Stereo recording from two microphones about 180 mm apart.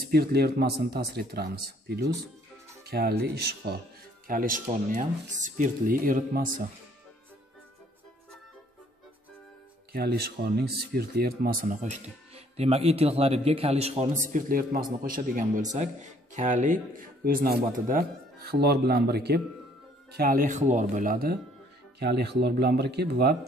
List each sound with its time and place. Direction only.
0.1 s speech: 60° right (ahead or behind)
4.3 s speech: 50° right (ahead or behind)
9.9 s speech: 60° right (ahead or behind)
11.8 s speech: 35° right (ahead or behind)
14.3 s speech: 50° right (ahead or behind)
22.0 s speech: 70° right (ahead or behind)